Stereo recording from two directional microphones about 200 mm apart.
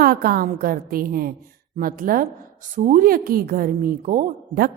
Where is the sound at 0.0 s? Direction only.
50° right (ahead or behind).